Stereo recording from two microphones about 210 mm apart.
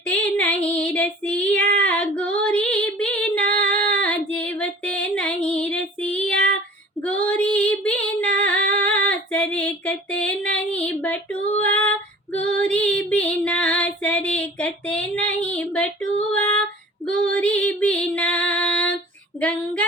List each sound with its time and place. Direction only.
0.3 s female singing: 5° left (ahead or behind)
19.4 s child singing: 5° left (ahead or behind)